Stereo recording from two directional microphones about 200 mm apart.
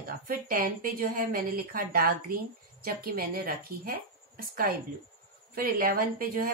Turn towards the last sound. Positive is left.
turn(degrees=-45)  # may be behind; listen again after turning